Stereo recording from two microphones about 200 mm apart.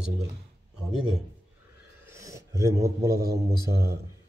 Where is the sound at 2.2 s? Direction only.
15° right (ahead or behind).